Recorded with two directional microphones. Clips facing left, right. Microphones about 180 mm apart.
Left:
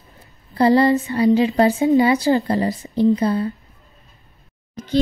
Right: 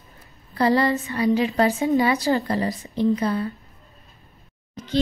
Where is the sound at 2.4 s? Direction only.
35° left (ahead or behind).